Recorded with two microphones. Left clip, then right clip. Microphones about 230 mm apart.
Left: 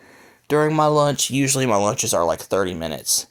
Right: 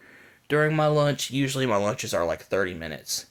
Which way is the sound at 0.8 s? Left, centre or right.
Left.